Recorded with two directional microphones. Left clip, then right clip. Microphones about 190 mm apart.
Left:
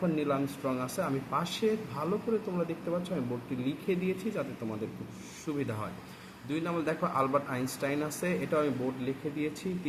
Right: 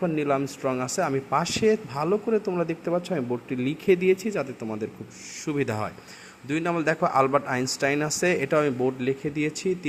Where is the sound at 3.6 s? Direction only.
50° right (ahead or behind).